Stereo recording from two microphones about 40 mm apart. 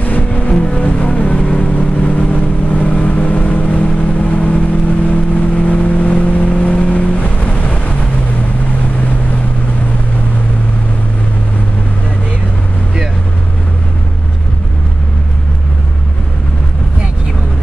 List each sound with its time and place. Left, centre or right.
0.0 s vehicle: left